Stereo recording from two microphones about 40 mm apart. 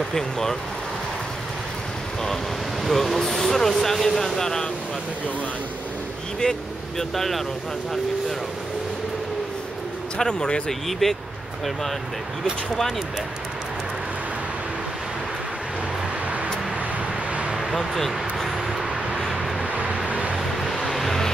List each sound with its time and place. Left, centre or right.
0.1 s speech: centre
2.8 s speech: centre
6.4 s speech: left
7.0 s speech: centre
10.1 s speech: left
10.7 s speech: centre
17.6 s vehicle: centre
19.7 s vehicle: right
20.6 s vehicle: centre